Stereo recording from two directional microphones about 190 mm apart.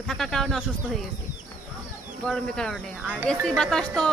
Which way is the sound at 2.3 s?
5° left (ahead or behind).